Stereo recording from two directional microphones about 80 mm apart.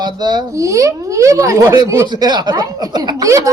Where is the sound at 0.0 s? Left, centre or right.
Right.